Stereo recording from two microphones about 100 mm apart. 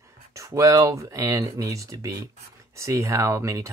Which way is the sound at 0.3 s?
30° right (ahead or behind).